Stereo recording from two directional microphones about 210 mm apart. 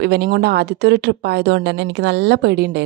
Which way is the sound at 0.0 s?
50° right (ahead or behind).